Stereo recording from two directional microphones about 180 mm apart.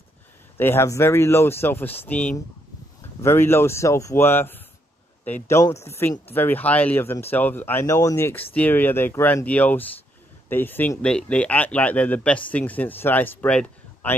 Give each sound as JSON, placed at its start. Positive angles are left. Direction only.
{"t": 0.6, "sound": "speech", "side_deg": 15}